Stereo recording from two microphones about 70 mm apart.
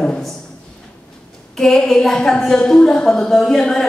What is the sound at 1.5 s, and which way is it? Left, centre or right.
A woman's voice, centre.